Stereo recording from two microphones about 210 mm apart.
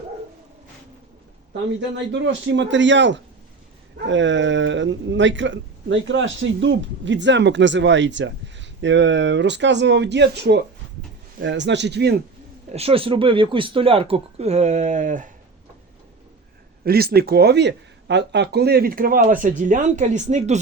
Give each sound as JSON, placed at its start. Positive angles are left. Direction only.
{"t": 2.1, "sound": "speech", "side_deg": -60}
{"t": 12.7, "sound": "speech", "side_deg": -25}
{"t": 16.8, "sound": "speech", "side_deg": -45}